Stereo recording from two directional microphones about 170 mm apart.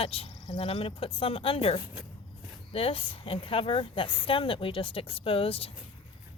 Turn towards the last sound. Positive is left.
turn(degrees=35)  # may be behind; listen again after turning